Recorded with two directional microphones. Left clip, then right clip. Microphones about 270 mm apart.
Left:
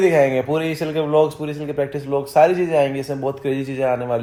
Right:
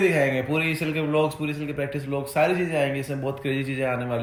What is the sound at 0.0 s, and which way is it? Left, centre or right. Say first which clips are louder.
Speech: left 6 dB; centre.